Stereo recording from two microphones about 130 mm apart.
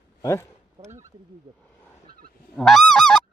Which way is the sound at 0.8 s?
35° right (ahead or behind).